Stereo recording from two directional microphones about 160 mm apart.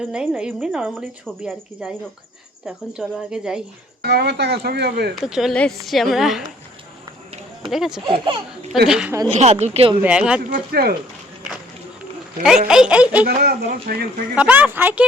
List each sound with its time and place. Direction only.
0.1 s speech: 5° right (ahead or behind)
4.0 s speech: 85° right
5.1 s speech: centre (ahead or behind)
7.7 s speech: 5° right (ahead or behind)
8.0 s speech: 35° right (ahead or behind)
8.9 s speech: 5° right (ahead or behind)
9.3 s speech: 45° right (ahead or behind)
10.0 s speech: 5° right (ahead or behind)
10.5 s speech: 75° right (ahead or behind)
12.4 s speech: 5° right (ahead or behind)
13.2 s speech: 75° right (ahead or behind)
14.3 s speech: 10° right (ahead or behind)